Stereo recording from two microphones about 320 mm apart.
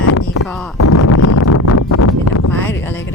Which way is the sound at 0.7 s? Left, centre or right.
Left.